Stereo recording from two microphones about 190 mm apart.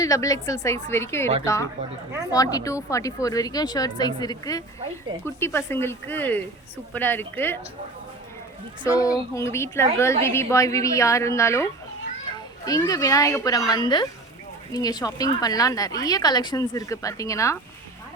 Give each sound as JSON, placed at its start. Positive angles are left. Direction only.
{"t": 0.0, "sound": "a woman's voice", "side_deg": 15}
{"t": 2.3, "sound": "a woman's voice", "side_deg": 20}
{"t": 9.0, "sound": "a woman's voice", "side_deg": 20}